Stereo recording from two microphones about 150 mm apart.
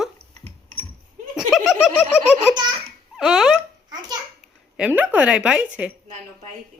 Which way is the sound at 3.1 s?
5° right (ahead or behind).